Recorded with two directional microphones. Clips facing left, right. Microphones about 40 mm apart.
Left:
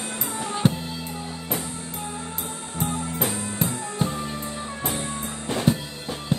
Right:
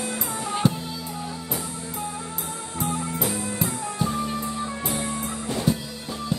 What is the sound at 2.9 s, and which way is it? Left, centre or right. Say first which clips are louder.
Music: right 1 dB; right.